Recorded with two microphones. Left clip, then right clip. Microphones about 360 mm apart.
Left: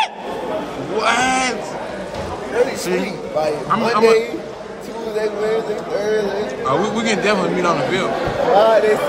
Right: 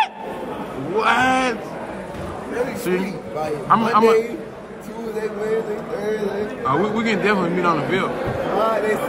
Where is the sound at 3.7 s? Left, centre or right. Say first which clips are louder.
Even; centre.